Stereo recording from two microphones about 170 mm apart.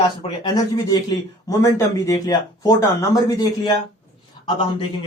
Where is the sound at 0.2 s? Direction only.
25° left (ahead or behind).